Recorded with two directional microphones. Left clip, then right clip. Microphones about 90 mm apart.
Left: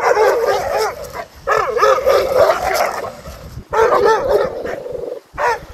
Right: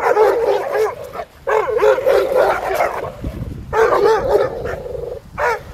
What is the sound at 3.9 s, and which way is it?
Dog, 80° right.